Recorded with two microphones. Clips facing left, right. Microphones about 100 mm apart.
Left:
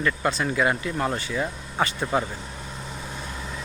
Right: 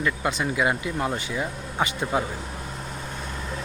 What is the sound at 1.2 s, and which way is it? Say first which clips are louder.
Speech: left 1 dB; 15° right (ahead or behind).